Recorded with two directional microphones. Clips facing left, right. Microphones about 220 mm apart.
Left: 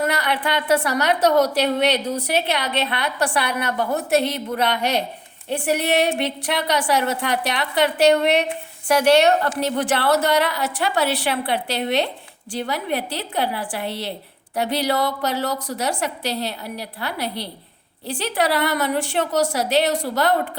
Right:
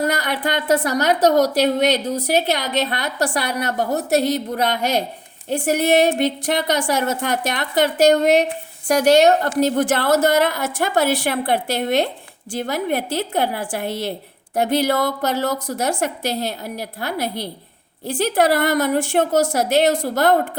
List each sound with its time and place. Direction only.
0.0 s a woman's voice: 40° right (ahead or behind)